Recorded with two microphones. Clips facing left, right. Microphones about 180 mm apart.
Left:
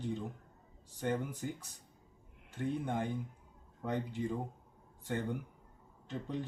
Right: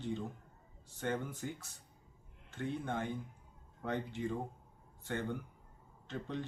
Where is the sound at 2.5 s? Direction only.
15° left (ahead or behind).